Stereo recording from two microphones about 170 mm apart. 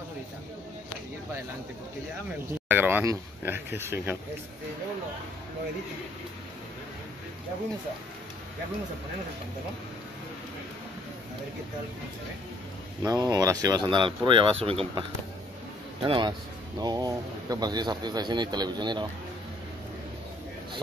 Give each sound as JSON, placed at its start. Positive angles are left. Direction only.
{"t": 2.7, "sound": "speech", "side_deg": -10}
{"t": 13.0, "sound": "speech", "side_deg": -25}